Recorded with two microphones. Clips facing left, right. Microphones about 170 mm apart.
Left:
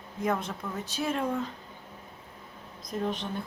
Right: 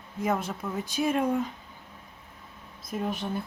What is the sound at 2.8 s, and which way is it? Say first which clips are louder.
Speech: even; 5° right (ahead or behind).